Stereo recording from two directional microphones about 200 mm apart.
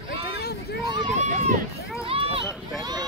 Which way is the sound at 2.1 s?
30° right (ahead or behind).